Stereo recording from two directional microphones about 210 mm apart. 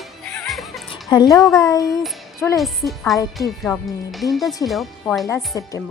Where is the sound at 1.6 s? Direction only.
15° left (ahead or behind).